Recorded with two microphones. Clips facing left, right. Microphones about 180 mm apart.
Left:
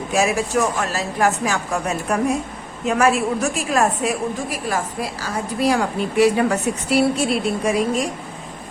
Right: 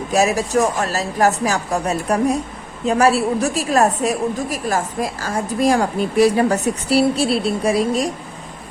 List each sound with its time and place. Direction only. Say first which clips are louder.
0.1 s a woman's voice: right 2 dB; 40° right (ahead or behind)